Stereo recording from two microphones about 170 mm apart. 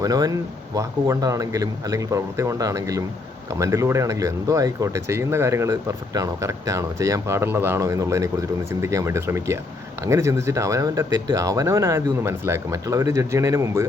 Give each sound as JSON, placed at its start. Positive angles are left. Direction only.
{"t": 0.0, "sound": "speech", "side_deg": -20}